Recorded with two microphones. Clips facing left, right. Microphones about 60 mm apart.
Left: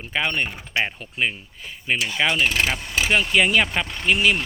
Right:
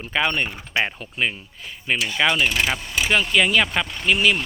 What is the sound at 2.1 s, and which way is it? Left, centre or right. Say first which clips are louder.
Speech: right 1 dB; centre.